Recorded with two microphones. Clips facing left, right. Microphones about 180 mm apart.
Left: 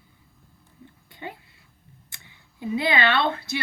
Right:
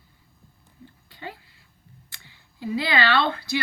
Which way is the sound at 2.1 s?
20° left (ahead or behind).